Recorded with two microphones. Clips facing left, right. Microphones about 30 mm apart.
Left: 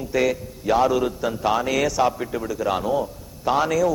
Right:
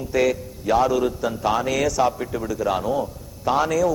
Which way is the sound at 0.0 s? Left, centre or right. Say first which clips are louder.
Right 1 dB; centre.